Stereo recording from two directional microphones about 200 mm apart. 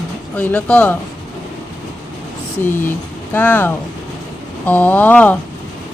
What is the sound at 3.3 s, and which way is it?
Speech, 10° left (ahead or behind).